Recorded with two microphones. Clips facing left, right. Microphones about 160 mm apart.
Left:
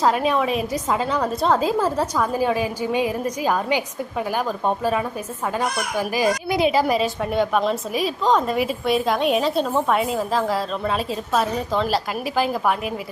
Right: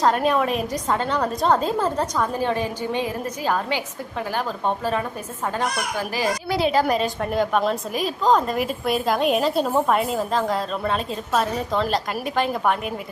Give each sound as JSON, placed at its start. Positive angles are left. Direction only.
{"t": 0.0, "sound": "a woman's voice", "side_deg": 0}